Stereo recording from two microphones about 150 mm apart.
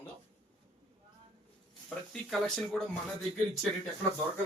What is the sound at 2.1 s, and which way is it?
Speech, 5° left (ahead or behind).